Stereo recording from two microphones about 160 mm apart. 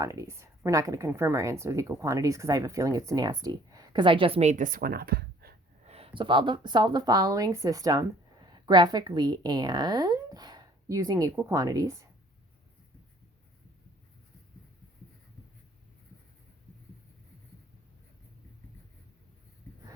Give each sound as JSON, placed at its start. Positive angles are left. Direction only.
{"t": 0.0, "sound": "speech", "side_deg": -20}
{"t": 5.8, "sound": "speech", "side_deg": -40}